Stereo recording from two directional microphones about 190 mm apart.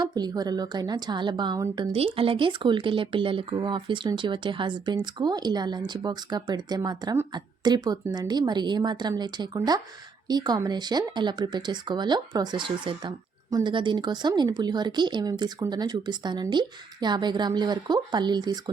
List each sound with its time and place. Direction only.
0.0 s a woman's voice: 20° right (ahead or behind)